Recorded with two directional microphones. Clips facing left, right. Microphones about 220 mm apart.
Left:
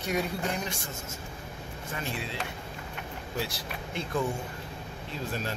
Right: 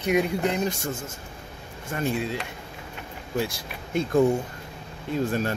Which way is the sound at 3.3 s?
45° right (ahead or behind).